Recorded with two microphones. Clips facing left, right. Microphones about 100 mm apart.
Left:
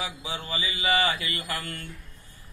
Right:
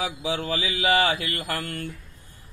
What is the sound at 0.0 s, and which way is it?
Mantra, 90° right.